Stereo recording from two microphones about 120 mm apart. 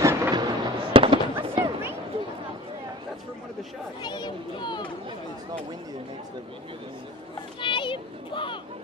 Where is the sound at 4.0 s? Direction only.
35° left (ahead or behind).